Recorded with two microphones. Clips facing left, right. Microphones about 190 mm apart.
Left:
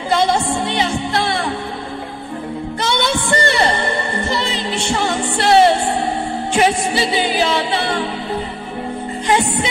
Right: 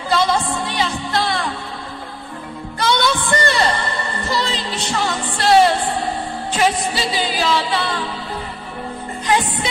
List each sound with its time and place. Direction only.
0.1 s music: 25° left (ahead or behind)
2.8 s music: 25° left (ahead or behind)